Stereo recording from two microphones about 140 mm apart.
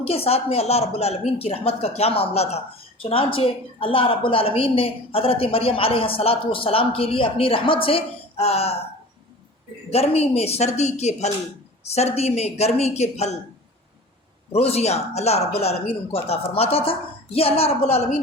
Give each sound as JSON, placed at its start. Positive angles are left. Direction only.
{"t": 0.0, "sound": "a woman's voice", "side_deg": 45}
{"t": 9.9, "sound": "speech", "side_deg": 45}
{"t": 14.5, "sound": "speech", "side_deg": 50}